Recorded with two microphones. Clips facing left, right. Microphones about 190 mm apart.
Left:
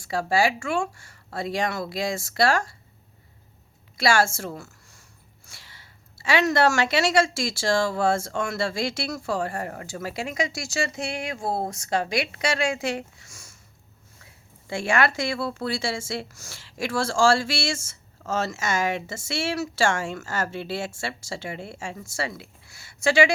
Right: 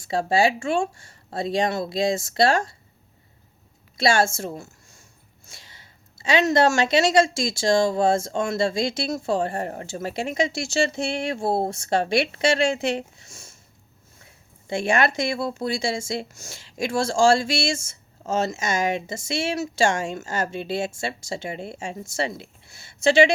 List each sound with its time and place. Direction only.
0.0 s speech: 25° right (ahead or behind)
3.9 s a woman's voice: 20° right (ahead or behind)
5.5 s a sound: 20° right (ahead or behind)
7.3 s speech: 20° right (ahead or behind)
14.7 s speech: 20° right (ahead or behind)